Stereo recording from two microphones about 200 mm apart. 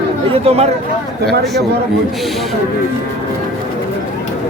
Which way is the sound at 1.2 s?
50° right (ahead or behind).